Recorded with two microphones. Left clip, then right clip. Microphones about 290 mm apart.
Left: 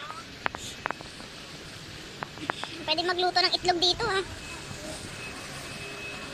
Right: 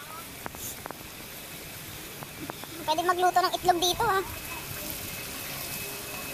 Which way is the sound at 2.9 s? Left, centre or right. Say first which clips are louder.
Right 2 dB; centre.